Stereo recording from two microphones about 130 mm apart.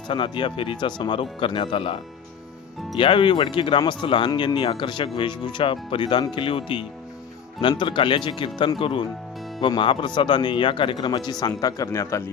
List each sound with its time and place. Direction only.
0.1 s speech: 40° left (ahead or behind)
3.0 s speech: 40° left (ahead or behind); by 12.3 s 20° left (ahead or behind)